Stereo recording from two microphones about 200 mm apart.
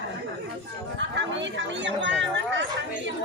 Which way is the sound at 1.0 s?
65° right (ahead or behind).